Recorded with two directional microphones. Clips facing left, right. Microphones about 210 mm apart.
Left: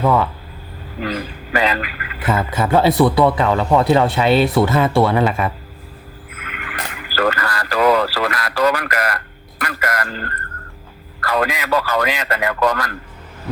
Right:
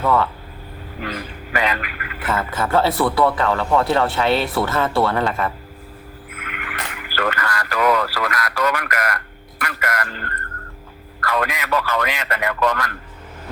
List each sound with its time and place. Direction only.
0.0 s speech: 15° left (ahead or behind)
1.0 s a man's voice: 35° left (ahead or behind)
2.2 s speech: 15° left (ahead or behind)
7.1 s speech: 35° left (ahead or behind)